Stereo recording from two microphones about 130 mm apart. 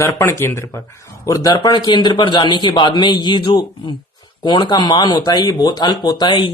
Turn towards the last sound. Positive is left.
turn(degrees=35)  # may be behind; listen again after turning